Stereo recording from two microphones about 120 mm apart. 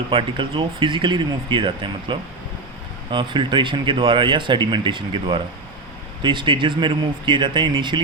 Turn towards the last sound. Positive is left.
turn(degrees=-40)  # may be behind; listen again after turning